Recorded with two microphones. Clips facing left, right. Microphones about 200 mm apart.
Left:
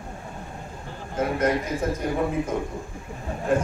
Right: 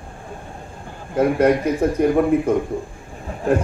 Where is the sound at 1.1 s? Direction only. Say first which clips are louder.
Right 7 dB; 60° right (ahead or behind).